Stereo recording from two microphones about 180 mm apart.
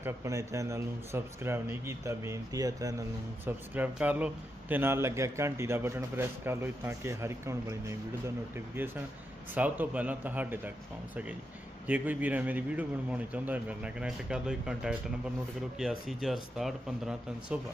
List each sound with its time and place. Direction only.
0.0 s a man's voice: 15° right (ahead or behind)